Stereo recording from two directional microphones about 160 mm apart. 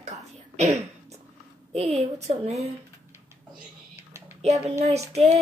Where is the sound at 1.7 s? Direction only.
45° right (ahead or behind).